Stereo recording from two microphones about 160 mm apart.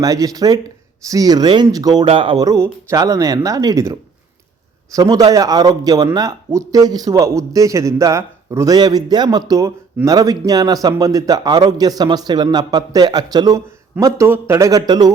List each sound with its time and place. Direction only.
0.0 s a man's voice: 20° right (ahead or behind)